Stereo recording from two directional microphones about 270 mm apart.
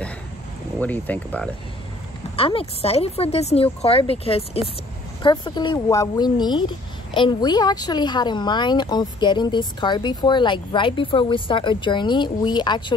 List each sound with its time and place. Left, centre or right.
0.7 s speech: centre
2.3 s speech: left